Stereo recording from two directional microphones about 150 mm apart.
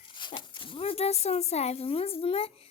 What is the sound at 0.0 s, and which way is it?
A child's voice, 30° left (ahead or behind).